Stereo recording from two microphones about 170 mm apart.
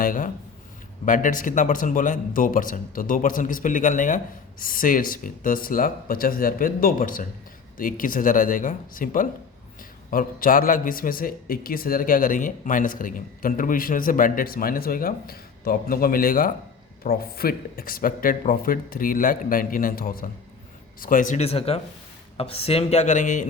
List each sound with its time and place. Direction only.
0.0 s a man's voice: 55° left (ahead or behind)